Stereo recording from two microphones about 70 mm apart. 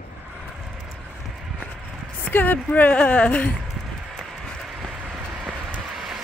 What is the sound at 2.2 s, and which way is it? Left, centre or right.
Speech, left.